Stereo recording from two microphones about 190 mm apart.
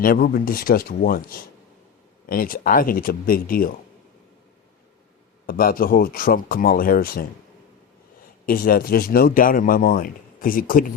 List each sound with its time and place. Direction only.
0.0 s speech: 50° left (ahead or behind)
5.5 s speech: 50° left (ahead or behind)
8.4 s speech: 50° left (ahead or behind)